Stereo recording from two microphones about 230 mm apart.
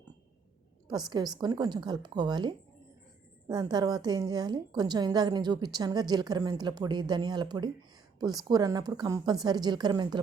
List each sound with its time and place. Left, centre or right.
1.1 s a woman's voice: centre